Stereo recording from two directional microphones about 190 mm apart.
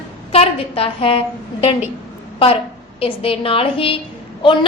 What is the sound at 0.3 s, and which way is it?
Speech, 30° left (ahead or behind).